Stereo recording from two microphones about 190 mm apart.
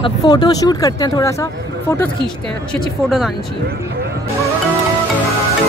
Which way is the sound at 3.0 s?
5° right (ahead or behind).